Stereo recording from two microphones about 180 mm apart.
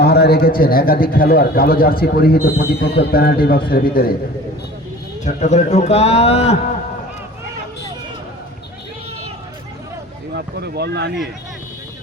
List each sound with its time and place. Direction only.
0.0 s a man's voice: 60° left (ahead or behind)
5.2 s speech: 40° left (ahead or behind)
10.3 s speech: 65° right (ahead or behind)